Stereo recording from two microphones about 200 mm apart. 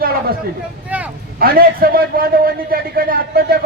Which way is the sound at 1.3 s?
45° right (ahead or behind).